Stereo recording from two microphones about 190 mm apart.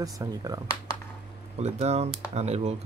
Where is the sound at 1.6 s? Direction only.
35° right (ahead or behind).